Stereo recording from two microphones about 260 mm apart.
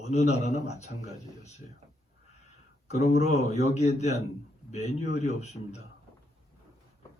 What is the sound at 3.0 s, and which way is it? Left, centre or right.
Speech, left.